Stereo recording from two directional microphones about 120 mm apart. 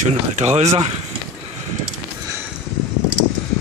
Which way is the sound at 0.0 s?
65° right (ahead or behind).